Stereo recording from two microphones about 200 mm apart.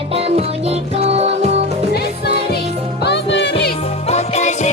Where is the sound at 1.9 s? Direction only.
50° left (ahead or behind).